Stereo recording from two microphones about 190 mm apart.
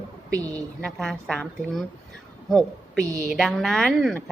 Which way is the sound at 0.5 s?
5° left (ahead or behind).